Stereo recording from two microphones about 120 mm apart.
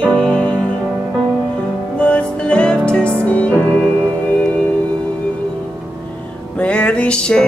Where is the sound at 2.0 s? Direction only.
10° left (ahead or behind).